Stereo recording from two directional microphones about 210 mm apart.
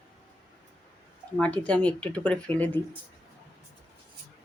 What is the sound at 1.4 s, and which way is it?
Speech, 5° left (ahead or behind).